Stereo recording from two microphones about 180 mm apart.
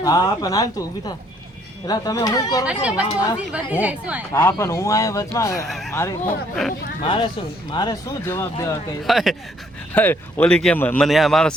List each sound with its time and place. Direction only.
0.0 s speech: 20° left (ahead or behind)
2.6 s speech: 5° right (ahead or behind)
4.3 s speech: 15° left (ahead or behind)
7.0 s speech: 30° left (ahead or behind)
9.0 s speech: centre (ahead or behind)
9.9 s speech: 10° left (ahead or behind)